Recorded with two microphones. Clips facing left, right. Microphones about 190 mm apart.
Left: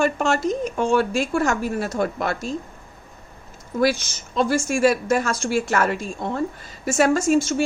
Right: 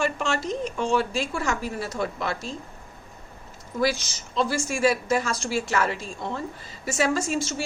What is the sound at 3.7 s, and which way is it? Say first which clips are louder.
A woman's voice: left 4 dB; 55° left (ahead or behind).